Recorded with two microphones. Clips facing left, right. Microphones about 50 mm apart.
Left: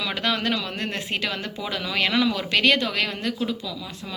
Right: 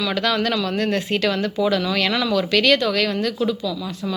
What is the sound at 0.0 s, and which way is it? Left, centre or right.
Speech, centre.